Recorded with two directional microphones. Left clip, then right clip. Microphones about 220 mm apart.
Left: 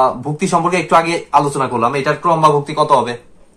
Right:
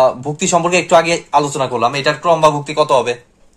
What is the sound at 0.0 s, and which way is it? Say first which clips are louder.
A man's voice: right 1 dB; 45° right (ahead or behind).